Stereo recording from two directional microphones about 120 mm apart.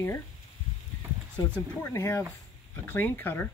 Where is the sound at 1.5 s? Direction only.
20° left (ahead or behind).